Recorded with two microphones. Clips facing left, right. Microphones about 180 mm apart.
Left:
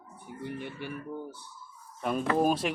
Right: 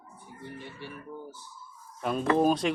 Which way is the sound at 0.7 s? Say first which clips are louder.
Left 4 dB; 65° left (ahead or behind).